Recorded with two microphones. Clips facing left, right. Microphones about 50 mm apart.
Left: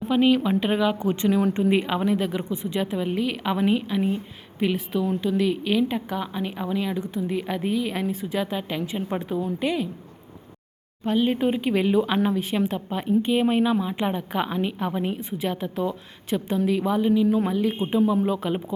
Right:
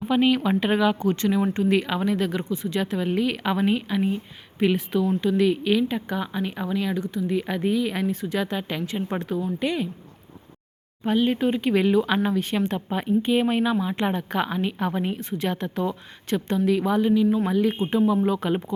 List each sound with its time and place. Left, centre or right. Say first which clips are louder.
0.1 s a woman's voice: left 1 dB; centre
0.9 s speech: even; centre
3.1 s a woman's voice: right 1 dB; centre
7.3 s a woman's voice: right 2 dB; centre
11.0 s a woman's voice: even; centre